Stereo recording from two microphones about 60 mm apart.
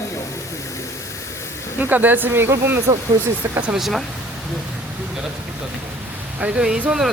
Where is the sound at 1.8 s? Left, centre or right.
Right.